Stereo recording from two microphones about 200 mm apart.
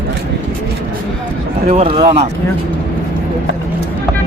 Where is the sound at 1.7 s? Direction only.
30° right (ahead or behind).